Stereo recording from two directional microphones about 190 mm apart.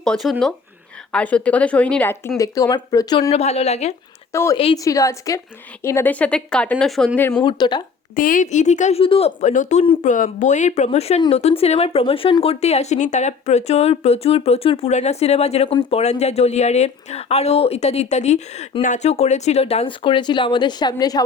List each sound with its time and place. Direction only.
0.0 s speech: centre (ahead or behind); by 3.2 s 20° left (ahead or behind)
3.2 s speech: 35° left (ahead or behind)
4.3 s speech: 15° left (ahead or behind)
4.5 s speech: 25° left (ahead or behind); by 7.4 s 10° left (ahead or behind)
7.4 s speech: 20° left (ahead or behind)
8.1 s speech: 45° left (ahead or behind); by 21.2 s 20° left (ahead or behind)